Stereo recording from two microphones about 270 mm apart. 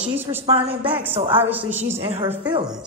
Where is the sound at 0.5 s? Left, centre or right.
Right.